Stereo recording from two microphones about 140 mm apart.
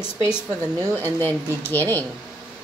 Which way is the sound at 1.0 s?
20° right (ahead or behind).